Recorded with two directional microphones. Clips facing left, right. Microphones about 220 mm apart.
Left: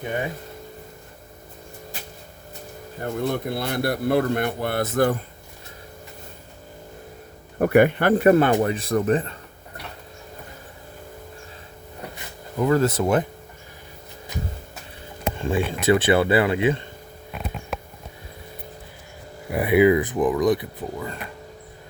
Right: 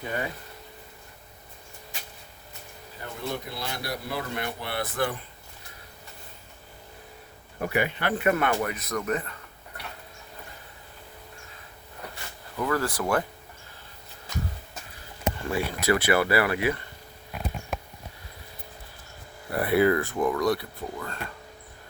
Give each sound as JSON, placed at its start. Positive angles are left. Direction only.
{"t": 3.0, "sound": "a man's voice", "side_deg": 55}
{"t": 7.6, "sound": "a man's voice", "side_deg": 55}
{"t": 8.2, "sound": "speech", "side_deg": 35}
{"t": 12.5, "sound": "speech", "side_deg": 25}
{"t": 15.4, "sound": "speech", "side_deg": 20}
{"t": 19.5, "sound": "speech", "side_deg": 15}